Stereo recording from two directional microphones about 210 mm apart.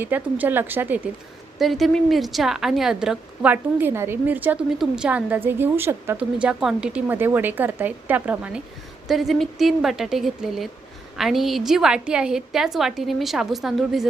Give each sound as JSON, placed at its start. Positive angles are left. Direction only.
{"t": 0.0, "sound": "a woman's voice", "side_deg": -10}